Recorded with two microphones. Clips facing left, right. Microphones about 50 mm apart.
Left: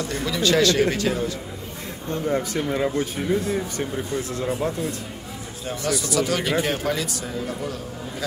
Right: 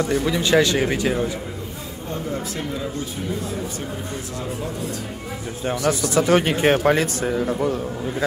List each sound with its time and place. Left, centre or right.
0.0 s speech: right
2.5 s speech: left
5.7 s a man's voice: right